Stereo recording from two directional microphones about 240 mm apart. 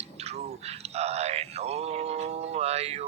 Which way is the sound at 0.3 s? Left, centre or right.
Right.